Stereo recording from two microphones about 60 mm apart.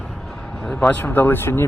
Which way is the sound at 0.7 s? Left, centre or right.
Centre.